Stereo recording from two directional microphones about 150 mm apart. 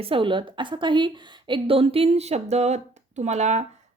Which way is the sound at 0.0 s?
35° right (ahead or behind).